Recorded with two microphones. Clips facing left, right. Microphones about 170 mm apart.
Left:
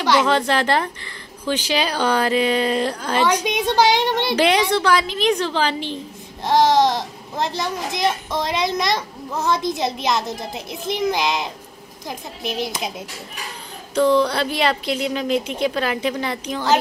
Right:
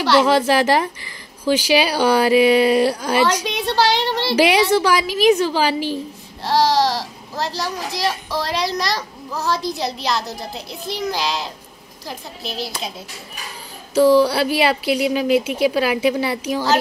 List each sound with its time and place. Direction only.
0.2 s speech: 10° right (ahead or behind)
3.4 s a woman's voice: 15° left (ahead or behind)
4.4 s speech: 10° right (ahead or behind)
6.4 s a child's voice: 20° left (ahead or behind)
13.9 s speech: 5° right (ahead or behind)